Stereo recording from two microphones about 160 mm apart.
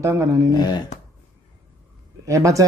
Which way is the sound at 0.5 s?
25° left (ahead or behind).